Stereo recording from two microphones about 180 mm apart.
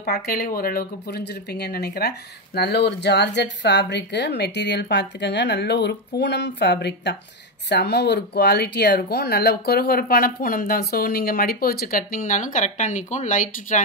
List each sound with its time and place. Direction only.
0.0 s speech: 55° left (ahead or behind)